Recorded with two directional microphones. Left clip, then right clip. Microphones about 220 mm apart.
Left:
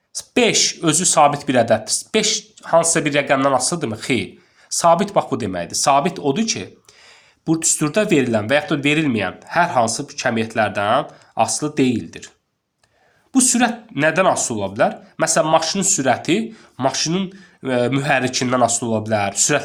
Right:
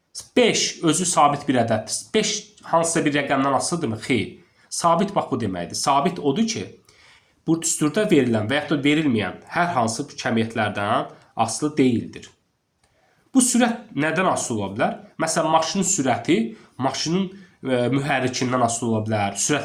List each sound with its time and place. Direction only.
0.1 s speech: 50° left (ahead or behind)
13.3 s speech: 45° left (ahead or behind)